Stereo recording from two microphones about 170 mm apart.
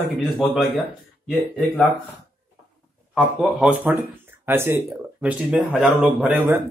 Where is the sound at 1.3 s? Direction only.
Centre (ahead or behind).